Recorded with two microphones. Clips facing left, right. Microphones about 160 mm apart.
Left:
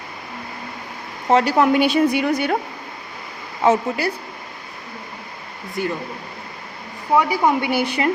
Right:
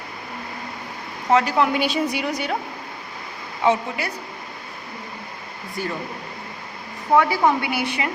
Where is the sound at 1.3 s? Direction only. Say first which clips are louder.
Left 2 dB; 35° left (ahead or behind).